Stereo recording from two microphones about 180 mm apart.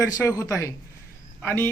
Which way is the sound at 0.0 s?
15° left (ahead or behind).